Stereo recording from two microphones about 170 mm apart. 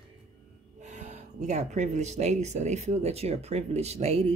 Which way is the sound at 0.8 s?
45° right (ahead or behind).